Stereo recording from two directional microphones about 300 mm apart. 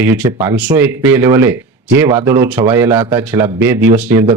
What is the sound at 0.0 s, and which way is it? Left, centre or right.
Speech, centre.